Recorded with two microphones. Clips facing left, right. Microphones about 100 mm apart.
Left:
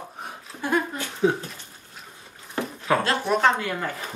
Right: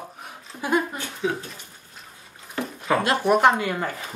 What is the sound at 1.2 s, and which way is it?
Speech, 35° left (ahead or behind).